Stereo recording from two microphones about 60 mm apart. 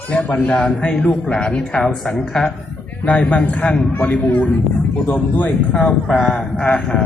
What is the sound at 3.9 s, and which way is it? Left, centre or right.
Speech, left.